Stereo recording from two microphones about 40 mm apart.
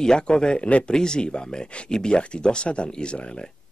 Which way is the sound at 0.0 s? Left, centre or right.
Centre.